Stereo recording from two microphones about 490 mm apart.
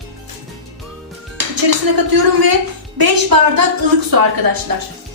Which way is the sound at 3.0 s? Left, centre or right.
Right.